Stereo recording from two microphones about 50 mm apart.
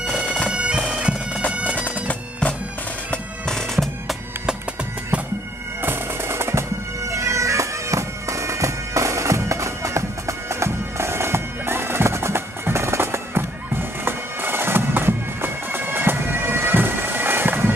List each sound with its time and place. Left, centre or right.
0.2 s bagpipes: left
0.5 s bagpipes: centre
3.4 s bagpipes: centre
5.8 s bagpipes: right
7.2 s bagpipes: right